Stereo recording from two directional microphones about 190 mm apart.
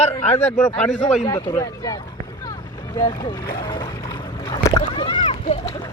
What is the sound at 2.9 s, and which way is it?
Speech, 20° left (ahead or behind).